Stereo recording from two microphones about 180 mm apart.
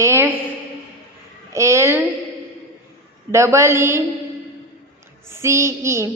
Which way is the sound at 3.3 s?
15° right (ahead or behind).